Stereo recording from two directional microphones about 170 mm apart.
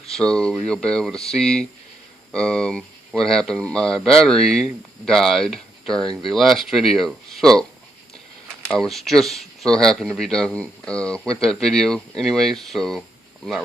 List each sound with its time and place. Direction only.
0.2 s speech: 5° left (ahead or behind)
8.6 s speech: 5° left (ahead or behind)